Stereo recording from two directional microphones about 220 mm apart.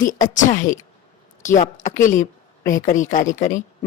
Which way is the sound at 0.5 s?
35° left (ahead or behind).